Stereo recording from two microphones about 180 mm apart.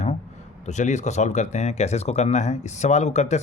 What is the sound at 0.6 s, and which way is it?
Speech, 40° left (ahead or behind).